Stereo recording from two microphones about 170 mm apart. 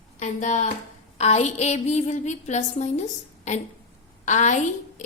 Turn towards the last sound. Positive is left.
turn(degrees=45)  # may be behind; listen again after turning